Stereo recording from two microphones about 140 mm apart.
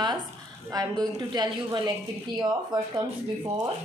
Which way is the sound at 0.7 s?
30° right (ahead or behind).